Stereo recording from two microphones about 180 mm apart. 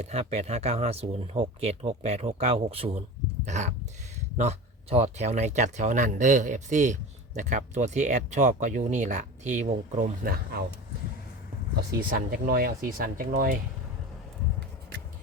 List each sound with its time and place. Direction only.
0.0 s speech: 35° right (ahead or behind)
10.2 s speech: 60° right (ahead or behind)
11.9 s speech: 60° right (ahead or behind)